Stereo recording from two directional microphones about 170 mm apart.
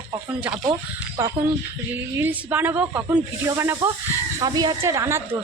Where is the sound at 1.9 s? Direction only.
10° right (ahead or behind).